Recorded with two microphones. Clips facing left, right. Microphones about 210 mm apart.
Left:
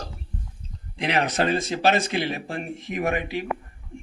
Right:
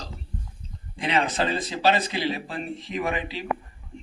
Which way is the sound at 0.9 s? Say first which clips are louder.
Left 1 dB; 70° left (ahead or behind).